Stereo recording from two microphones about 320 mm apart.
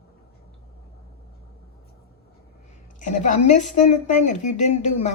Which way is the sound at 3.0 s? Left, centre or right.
Left.